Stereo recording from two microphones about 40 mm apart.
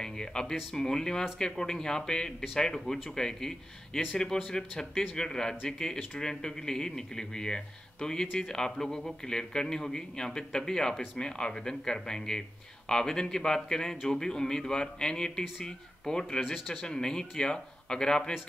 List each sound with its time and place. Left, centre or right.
0.0 s speech: centre
16.3 s speech: centre
16.6 s speech: centre